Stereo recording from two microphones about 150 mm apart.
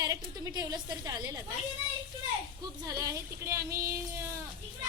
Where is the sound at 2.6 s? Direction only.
20° right (ahead or behind).